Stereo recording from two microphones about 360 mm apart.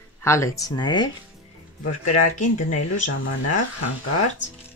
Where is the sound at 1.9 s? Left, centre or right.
Left.